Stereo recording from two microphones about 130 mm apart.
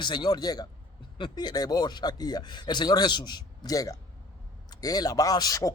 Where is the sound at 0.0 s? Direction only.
35° left (ahead or behind).